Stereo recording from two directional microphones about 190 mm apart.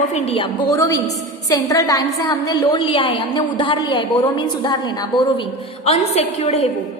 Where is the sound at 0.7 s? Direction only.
15° left (ahead or behind).